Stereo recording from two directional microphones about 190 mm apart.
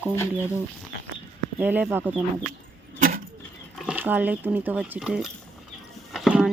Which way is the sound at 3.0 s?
50° right (ahead or behind).